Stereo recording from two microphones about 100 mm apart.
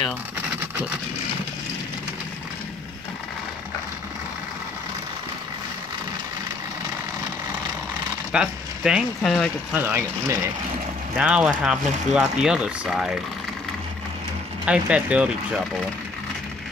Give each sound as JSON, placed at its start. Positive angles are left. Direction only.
{"t": 8.3, "sound": "speech", "side_deg": -10}
{"t": 9.8, "sound": "speech", "side_deg": -25}
{"t": 11.1, "sound": "speech", "side_deg": -10}
{"t": 14.7, "sound": "speech", "side_deg": -10}